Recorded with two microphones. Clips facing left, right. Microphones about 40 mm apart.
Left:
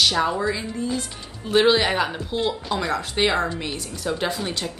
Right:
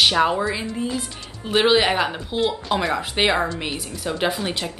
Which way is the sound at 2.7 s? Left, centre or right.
Right.